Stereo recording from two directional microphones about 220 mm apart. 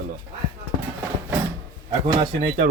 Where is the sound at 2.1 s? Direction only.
25° right (ahead or behind).